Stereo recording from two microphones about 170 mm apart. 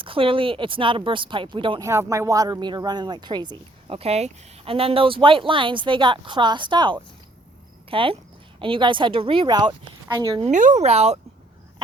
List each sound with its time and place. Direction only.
0.0 s speech: 30° right (ahead or behind)
1.8 s speech: 15° right (ahead or behind)
10.4 s speech: 50° right (ahead or behind)